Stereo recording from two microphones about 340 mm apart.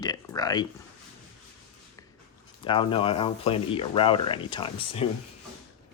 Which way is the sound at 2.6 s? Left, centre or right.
Centre.